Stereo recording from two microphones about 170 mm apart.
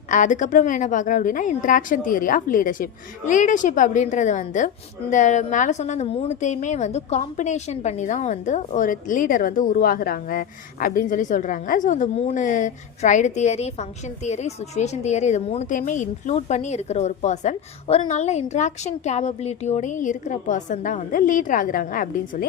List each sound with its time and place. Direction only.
0.1 s a woman's voice: 50° left (ahead or behind)